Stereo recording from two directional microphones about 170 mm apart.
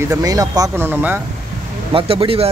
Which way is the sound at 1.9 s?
35° right (ahead or behind).